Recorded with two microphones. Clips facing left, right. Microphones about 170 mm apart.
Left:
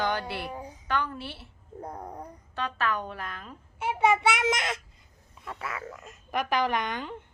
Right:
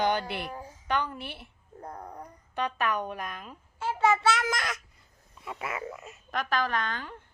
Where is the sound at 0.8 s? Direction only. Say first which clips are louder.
Right 1 dB; 20° right (ahead or behind).